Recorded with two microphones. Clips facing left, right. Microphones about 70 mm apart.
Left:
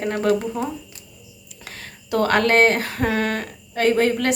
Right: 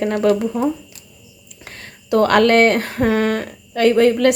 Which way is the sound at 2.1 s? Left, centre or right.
Right.